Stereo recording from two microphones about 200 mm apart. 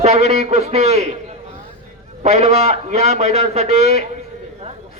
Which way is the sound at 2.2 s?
35° right (ahead or behind).